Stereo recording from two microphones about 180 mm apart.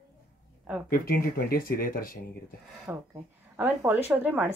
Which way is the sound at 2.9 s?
10° right (ahead or behind).